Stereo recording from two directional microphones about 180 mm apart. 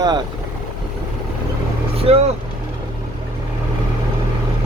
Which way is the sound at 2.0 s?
35° right (ahead or behind).